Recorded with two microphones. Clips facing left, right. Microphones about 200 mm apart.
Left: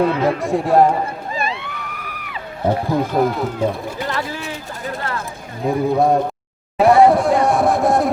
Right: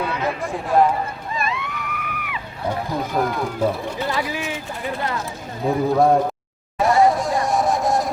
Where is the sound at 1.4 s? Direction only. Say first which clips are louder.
Right 1 dB; 30° left (ahead or behind).